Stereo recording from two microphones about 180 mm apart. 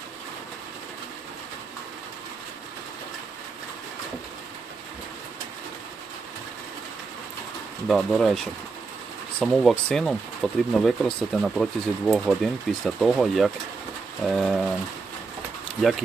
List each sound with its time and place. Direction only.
7.9 s speech: centre (ahead or behind)
9.4 s speech: centre (ahead or behind)
15.8 s speech: centre (ahead or behind)